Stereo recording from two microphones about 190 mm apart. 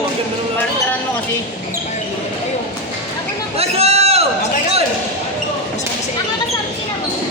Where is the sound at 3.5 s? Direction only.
35° right (ahead or behind).